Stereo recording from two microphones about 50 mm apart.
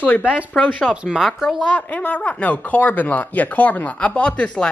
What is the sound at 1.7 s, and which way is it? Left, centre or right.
Speech, left.